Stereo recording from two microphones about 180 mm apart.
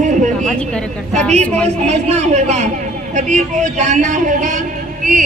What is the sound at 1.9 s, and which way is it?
A man's voice, 40° right (ahead or behind).